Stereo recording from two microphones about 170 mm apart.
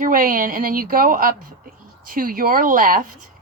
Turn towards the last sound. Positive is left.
turn(degrees=-55)  # may be behind; listen again after turning